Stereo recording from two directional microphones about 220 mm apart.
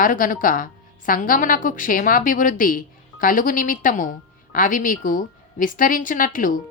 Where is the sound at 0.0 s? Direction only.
35° left (ahead or behind).